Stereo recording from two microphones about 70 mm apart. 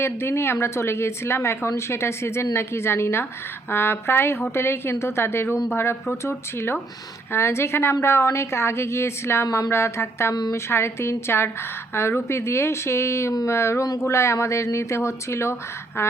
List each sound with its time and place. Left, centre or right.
0.0 s a woman's voice: left